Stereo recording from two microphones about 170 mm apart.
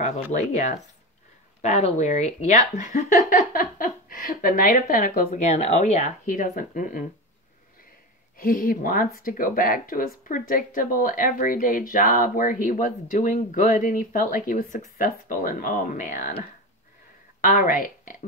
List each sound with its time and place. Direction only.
0.0 s speech: 45° left (ahead or behind)
8.4 s speech: 55° left (ahead or behind)
17.4 s speech: 55° left (ahead or behind)